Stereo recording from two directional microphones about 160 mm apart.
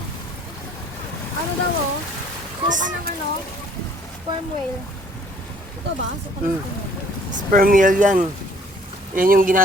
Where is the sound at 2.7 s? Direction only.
55° right (ahead or behind).